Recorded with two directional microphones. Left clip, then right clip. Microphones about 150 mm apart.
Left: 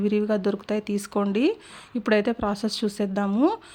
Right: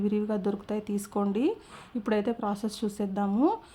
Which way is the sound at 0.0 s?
20° left (ahead or behind).